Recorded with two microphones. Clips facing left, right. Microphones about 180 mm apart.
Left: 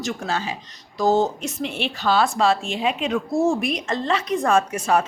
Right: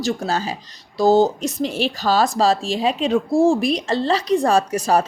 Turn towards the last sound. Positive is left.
turn(degrees=-35)  # may be behind; listen again after turning